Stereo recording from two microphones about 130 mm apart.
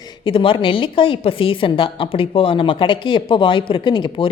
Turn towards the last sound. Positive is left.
turn(degrees=40)  # may be behind; listen again after turning